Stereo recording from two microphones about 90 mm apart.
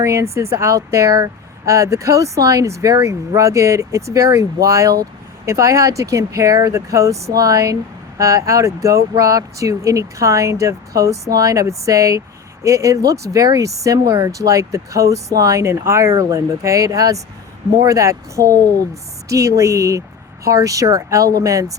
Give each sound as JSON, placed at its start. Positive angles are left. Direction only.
{"t": 0.0, "sound": "speech", "side_deg": -35}